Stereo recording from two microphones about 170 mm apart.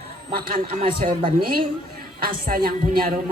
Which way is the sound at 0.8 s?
30° right (ahead or behind).